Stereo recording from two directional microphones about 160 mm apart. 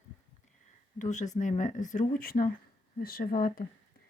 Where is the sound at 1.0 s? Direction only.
50° left (ahead or behind).